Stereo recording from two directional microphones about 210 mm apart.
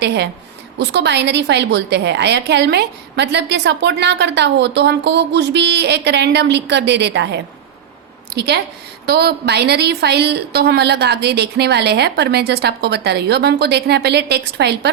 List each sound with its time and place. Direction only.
0.0 s a woman's voice: 55° right (ahead or behind)